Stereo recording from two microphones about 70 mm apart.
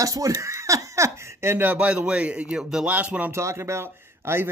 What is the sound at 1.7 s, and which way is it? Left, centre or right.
Speech, centre.